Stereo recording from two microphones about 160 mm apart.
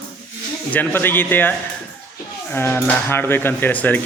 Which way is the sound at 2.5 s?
10° left (ahead or behind).